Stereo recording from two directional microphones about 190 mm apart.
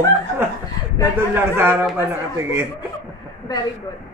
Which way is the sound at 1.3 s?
10° right (ahead or behind).